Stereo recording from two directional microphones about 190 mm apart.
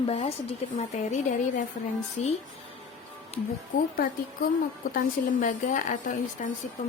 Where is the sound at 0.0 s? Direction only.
30° left (ahead or behind).